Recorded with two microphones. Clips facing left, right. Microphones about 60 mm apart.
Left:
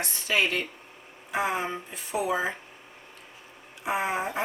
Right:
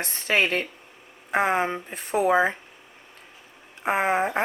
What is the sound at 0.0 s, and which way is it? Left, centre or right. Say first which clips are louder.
A woman's voice: right 3 dB; right.